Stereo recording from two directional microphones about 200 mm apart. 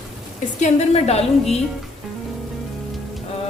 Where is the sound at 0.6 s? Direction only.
30° left (ahead or behind).